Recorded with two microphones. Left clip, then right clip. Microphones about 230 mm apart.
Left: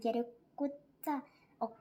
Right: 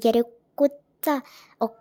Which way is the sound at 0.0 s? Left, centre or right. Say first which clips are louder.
Right 15 dB; right.